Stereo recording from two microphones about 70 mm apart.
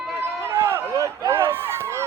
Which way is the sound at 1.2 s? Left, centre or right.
Right.